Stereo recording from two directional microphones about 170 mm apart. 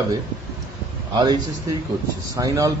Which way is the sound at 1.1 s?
25° right (ahead or behind).